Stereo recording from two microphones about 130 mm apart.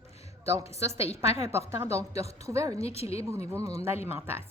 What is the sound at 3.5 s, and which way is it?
Speech, 25° right (ahead or behind).